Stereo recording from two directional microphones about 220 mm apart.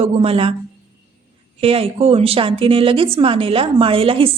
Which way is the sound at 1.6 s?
25° right (ahead or behind).